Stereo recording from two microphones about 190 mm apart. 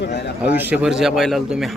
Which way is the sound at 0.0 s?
60° left (ahead or behind).